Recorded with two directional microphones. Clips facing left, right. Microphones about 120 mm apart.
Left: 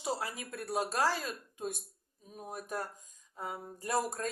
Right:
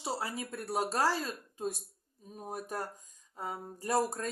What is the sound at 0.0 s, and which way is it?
Speech, 30° right (ahead or behind).